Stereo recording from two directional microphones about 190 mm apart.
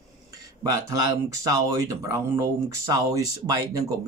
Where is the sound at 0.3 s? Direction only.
15° right (ahead or behind).